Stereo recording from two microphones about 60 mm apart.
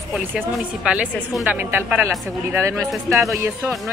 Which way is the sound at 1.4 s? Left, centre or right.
Right.